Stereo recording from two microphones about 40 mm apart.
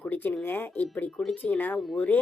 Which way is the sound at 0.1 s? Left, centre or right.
Left.